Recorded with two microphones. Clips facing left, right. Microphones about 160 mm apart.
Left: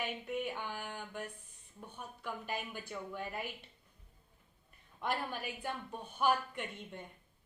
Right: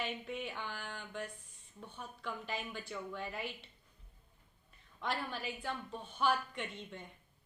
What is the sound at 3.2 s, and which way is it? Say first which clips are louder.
Speech: left 1 dB; 50° left (ahead or behind).